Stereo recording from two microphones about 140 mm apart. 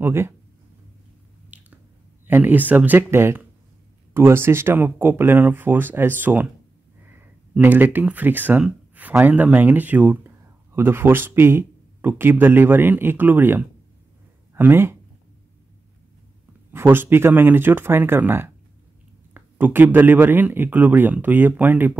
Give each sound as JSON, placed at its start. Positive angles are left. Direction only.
{"t": 0.0, "sound": "speech", "side_deg": -15}
{"t": 1.5, "sound": "squish", "side_deg": -10}
{"t": 2.2, "sound": "speech", "side_deg": -15}
{"t": 16.7, "sound": "speech", "side_deg": -15}